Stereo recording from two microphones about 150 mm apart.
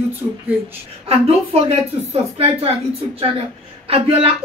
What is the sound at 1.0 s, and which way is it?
Speech, 40° right (ahead or behind).